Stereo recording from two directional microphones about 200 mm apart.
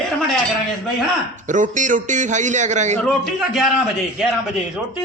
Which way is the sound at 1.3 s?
40° right (ahead or behind).